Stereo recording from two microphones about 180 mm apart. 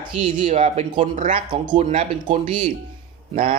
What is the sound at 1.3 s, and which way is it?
Speech, 25° right (ahead or behind).